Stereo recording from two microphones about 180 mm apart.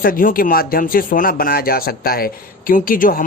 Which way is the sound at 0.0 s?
50° left (ahead or behind).